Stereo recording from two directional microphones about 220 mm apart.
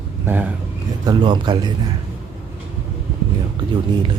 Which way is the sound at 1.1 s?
20° right (ahead or behind).